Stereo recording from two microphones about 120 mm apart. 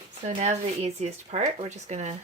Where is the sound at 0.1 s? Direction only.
70° right (ahead or behind).